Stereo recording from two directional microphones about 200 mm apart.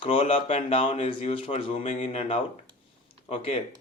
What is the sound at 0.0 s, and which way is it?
Speech, 30° left (ahead or behind).